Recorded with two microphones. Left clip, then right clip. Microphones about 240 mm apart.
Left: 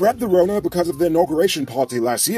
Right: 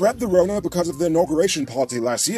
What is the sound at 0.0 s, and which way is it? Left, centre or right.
Speech, right.